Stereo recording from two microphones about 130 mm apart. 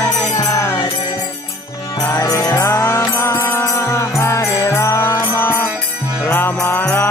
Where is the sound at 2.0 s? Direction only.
25° left (ahead or behind).